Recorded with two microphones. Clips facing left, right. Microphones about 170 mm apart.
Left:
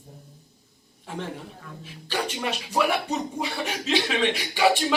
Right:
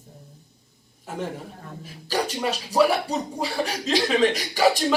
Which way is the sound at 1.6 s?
40° right (ahead or behind).